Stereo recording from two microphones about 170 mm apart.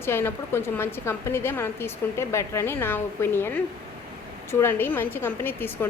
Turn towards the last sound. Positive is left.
turn(degrees=10)  # may be behind; listen again after turning